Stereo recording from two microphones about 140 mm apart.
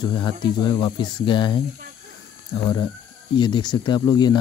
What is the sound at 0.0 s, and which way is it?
Speech, 35° left (ahead or behind).